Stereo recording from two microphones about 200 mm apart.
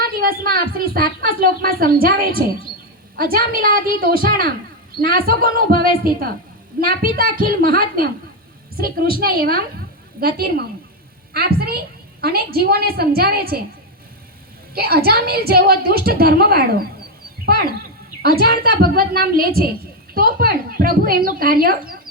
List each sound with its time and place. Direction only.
0.0 s a woman's voice: 50° right (ahead or behind)
14.8 s a woman's voice: 50° right (ahead or behind)
17.4 s a sound: 50° right (ahead or behind)
18.2 s a woman's voice: 50° right (ahead or behind)